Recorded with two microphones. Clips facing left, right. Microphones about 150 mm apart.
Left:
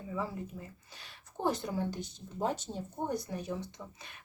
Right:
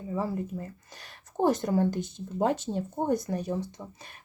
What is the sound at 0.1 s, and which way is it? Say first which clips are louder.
Speech: right 7 dB; 45° right (ahead or behind).